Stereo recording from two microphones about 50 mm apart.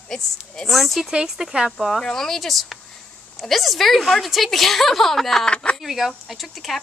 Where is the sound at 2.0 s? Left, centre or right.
Centre.